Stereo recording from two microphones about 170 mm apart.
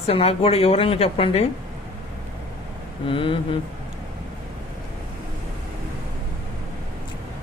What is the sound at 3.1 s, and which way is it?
Speech, 30° left (ahead or behind).